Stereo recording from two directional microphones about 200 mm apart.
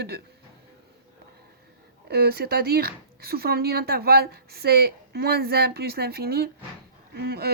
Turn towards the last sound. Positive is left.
turn(degrees=-50)  # may be behind; listen again after turning